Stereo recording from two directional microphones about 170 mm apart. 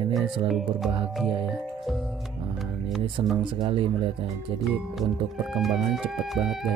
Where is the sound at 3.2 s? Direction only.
30° right (ahead or behind).